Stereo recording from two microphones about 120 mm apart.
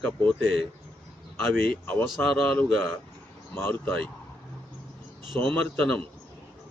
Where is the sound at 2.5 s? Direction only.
15° left (ahead or behind).